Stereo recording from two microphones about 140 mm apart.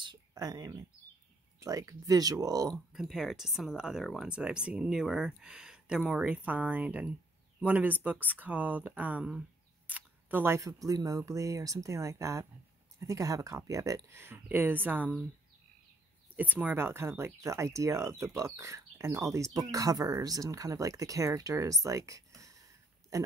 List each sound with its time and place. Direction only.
0.0 s speech: 30° right (ahead or behind)
2.9 s speech: centre (ahead or behind)
16.4 s speech: 10° right (ahead or behind)
21.8 s a sound: 20° right (ahead or behind)
23.1 s speech: 25° right (ahead or behind)